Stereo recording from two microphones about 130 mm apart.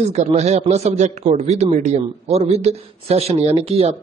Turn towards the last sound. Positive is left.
turn(degrees=-50)  # may be behind; listen again after turning